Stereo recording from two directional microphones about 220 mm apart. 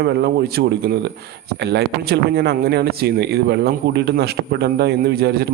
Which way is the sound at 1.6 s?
50° right (ahead or behind).